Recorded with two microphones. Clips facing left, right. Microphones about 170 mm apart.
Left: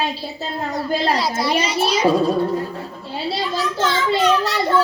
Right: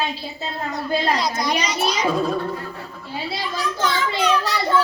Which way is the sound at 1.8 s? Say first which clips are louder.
Left 5 dB; 30° left (ahead or behind).